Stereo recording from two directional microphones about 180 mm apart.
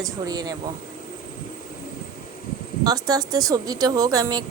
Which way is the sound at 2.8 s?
20° right (ahead or behind).